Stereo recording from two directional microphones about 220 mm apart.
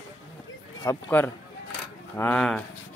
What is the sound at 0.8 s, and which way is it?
Speech, 10° left (ahead or behind).